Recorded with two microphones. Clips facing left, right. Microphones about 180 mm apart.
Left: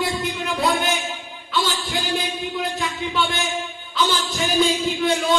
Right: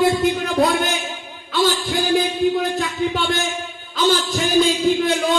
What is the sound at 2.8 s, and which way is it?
Speech, 50° right (ahead or behind).